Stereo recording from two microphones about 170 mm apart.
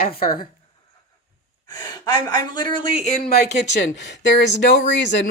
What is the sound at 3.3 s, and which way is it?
Speech, 75° left (ahead or behind).